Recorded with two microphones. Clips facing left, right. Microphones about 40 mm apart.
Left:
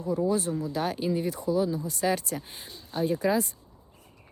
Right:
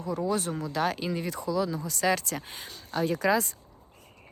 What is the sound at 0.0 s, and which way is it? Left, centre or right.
Speech, right.